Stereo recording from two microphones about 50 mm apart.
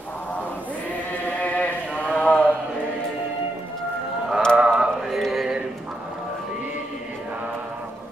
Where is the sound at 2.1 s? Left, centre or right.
Left.